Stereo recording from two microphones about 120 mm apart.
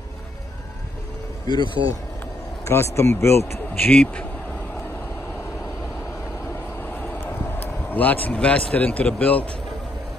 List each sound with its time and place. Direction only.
1.5 s speech: 40° left (ahead or behind)
2.6 s speech: 25° left (ahead or behind)
7.0 s vehicle: 15° left (ahead or behind)